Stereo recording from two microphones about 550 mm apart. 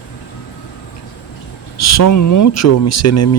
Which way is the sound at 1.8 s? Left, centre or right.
Left.